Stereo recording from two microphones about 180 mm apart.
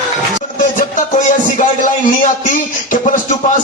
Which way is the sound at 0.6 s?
45° left (ahead or behind).